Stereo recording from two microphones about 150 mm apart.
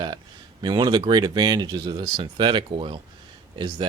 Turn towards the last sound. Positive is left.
turn(degrees=-30)  # may be behind; listen again after turning